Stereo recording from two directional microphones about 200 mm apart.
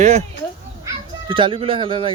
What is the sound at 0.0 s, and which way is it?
Speech, 35° right (ahead or behind).